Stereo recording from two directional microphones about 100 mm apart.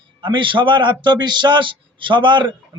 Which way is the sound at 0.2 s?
55° right (ahead or behind).